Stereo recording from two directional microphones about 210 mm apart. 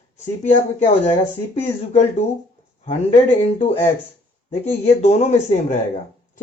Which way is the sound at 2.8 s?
30° left (ahead or behind).